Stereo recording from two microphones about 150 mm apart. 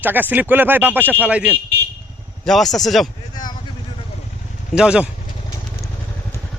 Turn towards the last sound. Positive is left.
turn(degrees=-5)  # may be behind; listen again after turning